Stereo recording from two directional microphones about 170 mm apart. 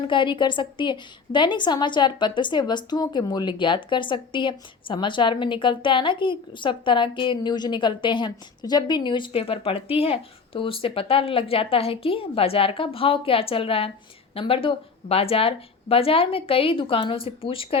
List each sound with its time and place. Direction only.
0.1 s a woman's voice: 30° left (ahead or behind)